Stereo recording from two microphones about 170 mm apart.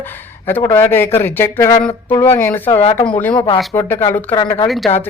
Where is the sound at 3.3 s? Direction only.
25° left (ahead or behind).